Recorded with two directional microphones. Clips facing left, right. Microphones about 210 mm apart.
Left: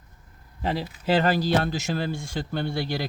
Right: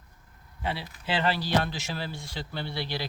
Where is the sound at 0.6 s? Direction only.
40° left (ahead or behind).